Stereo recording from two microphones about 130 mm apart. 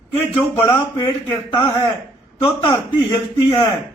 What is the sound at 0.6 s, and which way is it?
Speech, 35° left (ahead or behind).